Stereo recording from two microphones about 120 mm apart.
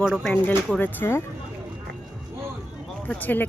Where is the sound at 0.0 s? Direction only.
Centre (ahead or behind).